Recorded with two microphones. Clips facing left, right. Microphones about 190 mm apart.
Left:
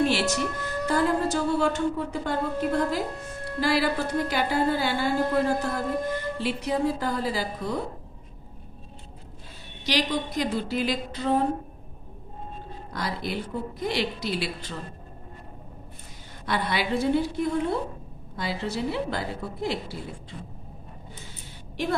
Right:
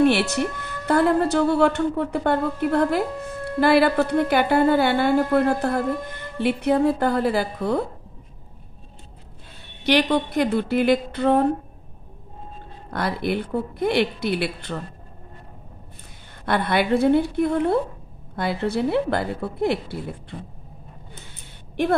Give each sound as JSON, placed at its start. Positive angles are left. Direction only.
{"t": 0.0, "sound": "a woman's voice", "side_deg": -60}
{"t": 9.8, "sound": "a woman's voice", "side_deg": -60}
{"t": 12.9, "sound": "a woman's voice", "side_deg": -60}
{"t": 16.4, "sound": "a woman's voice", "side_deg": -55}
{"t": 21.8, "sound": "a woman's voice", "side_deg": -55}